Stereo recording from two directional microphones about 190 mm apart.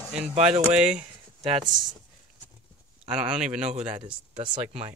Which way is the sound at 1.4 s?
25° right (ahead or behind).